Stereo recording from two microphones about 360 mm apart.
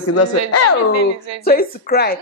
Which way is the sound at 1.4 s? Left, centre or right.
Left.